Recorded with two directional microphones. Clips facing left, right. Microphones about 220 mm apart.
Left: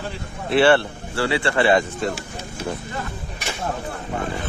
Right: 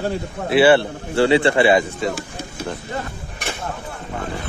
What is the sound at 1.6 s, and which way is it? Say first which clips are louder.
Speech: right 2 dB; 5° right (ahead or behind).